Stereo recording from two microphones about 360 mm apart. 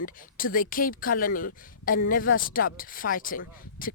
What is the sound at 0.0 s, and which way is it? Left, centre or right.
Speech, left.